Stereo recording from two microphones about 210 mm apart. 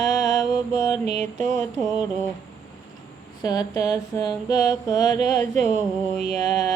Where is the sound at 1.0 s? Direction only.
30° right (ahead or behind).